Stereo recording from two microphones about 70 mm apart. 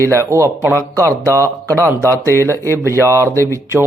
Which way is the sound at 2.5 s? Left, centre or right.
Left.